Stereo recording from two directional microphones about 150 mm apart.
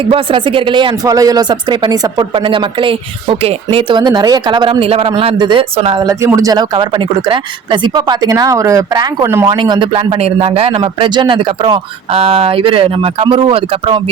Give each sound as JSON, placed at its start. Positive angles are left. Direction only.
{"t": 0.0, "sound": "speech", "side_deg": -35}
{"t": 6.1, "sound": "speech", "side_deg": -20}
{"t": 9.6, "sound": "speech", "side_deg": -30}